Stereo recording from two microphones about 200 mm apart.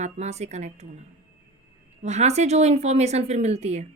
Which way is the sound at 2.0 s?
35° right (ahead or behind).